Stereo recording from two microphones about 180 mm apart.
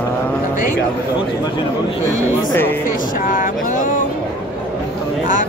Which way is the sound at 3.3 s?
50° left (ahead or behind).